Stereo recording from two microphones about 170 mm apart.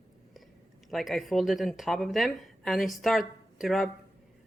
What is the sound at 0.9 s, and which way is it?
Speech, centre (ahead or behind).